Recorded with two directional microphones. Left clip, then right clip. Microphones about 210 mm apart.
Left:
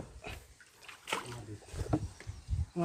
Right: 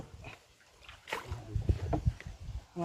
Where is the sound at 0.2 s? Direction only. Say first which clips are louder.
Left 4 dB; 55° left (ahead or behind).